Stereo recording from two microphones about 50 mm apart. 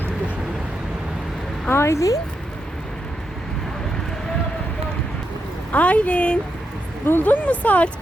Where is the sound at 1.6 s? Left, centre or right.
Left.